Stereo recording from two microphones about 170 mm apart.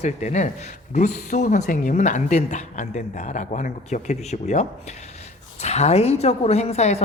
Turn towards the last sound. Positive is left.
turn(degrees=40)  # may be behind; listen again after turning